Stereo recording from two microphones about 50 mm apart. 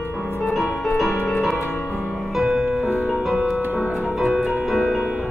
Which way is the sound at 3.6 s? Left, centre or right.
Right.